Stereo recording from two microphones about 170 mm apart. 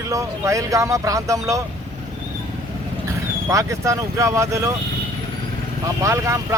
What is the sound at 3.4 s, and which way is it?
Speech, 15° right (ahead or behind).